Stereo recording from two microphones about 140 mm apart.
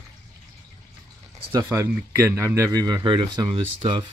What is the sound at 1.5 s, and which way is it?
Speech, 20° right (ahead or behind).